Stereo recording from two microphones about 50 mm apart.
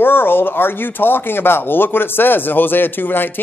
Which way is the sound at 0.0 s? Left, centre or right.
Left.